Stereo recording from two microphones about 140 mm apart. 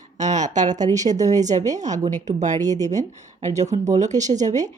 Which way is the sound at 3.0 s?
60° right (ahead or behind).